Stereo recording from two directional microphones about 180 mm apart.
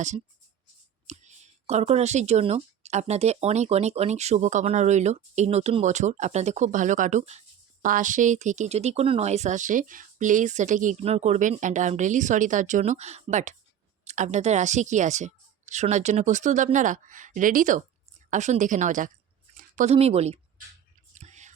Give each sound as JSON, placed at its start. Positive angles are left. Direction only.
{"t": 1.0, "sound": "a woman's voice", "side_deg": -40}
{"t": 21.2, "sound": "whispering", "side_deg": -40}